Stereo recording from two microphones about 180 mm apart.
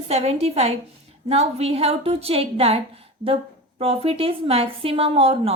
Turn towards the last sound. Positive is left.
turn(degrees=-30)  # may be behind; listen again after turning